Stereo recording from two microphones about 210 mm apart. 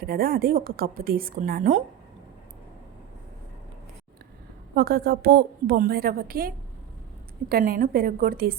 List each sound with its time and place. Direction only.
0.0 s a woman's voice: 45° right (ahead or behind)
4.7 s a woman's voice: 50° right (ahead or behind)
7.5 s a woman's voice: 40° right (ahead or behind)